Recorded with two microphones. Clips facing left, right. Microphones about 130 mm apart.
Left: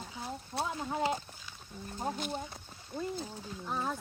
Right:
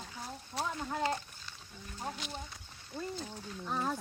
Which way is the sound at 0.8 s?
10° left (ahead or behind).